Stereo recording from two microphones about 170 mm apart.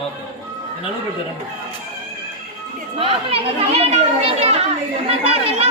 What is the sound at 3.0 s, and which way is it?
A child's voice, 35° right (ahead or behind).